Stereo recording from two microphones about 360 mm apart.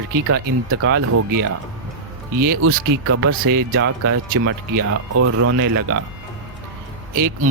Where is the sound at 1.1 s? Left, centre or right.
Right.